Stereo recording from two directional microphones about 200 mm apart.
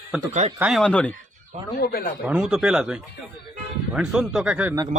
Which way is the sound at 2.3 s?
5° right (ahead or behind).